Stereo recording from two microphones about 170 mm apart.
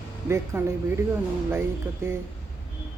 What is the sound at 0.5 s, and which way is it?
Speech, 10° right (ahead or behind).